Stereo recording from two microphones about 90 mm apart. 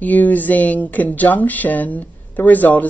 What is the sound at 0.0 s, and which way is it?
Speech, 20° left (ahead or behind).